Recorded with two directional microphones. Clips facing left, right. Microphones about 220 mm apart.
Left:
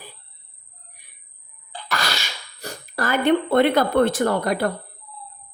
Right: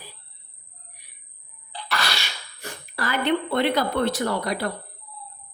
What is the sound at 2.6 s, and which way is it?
A woman's voice, 40° left (ahead or behind).